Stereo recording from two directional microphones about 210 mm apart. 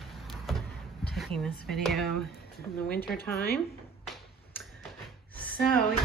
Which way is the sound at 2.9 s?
45° left (ahead or behind).